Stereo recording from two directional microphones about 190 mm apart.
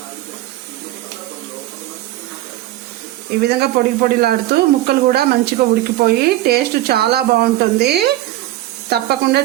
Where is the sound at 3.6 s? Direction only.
55° right (ahead or behind).